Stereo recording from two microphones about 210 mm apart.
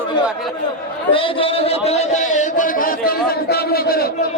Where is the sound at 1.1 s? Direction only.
25° left (ahead or behind); by 4.1 s 45° left (ahead or behind).